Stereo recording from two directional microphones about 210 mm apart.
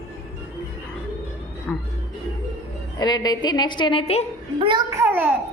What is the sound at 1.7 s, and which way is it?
Speech, 5° left (ahead or behind).